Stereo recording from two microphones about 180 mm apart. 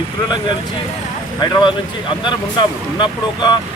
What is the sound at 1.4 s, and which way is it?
Speech, 25° left (ahead or behind).